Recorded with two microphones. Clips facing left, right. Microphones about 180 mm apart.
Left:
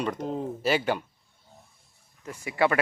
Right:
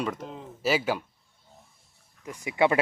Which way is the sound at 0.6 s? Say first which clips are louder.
Even; 5° right (ahead or behind).